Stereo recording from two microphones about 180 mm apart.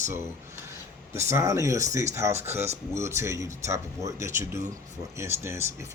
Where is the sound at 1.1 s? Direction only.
15° right (ahead or behind).